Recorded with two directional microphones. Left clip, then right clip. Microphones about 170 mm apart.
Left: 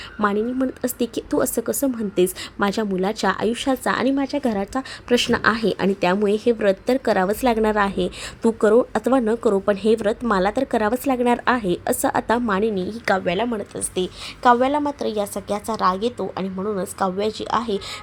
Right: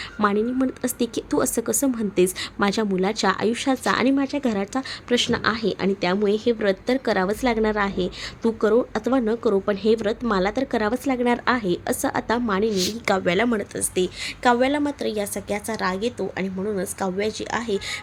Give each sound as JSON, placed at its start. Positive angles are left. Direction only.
{"t": 0.2, "sound": "a woman's voice", "side_deg": 5}
{"t": 5.0, "sound": "a woman's voice", "side_deg": 20}
{"t": 13.2, "sound": "speech", "side_deg": -20}
{"t": 13.9, "sound": "a woman's voice", "side_deg": 0}